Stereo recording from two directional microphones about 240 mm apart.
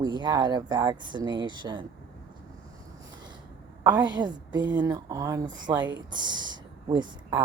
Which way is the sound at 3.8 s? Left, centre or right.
Centre.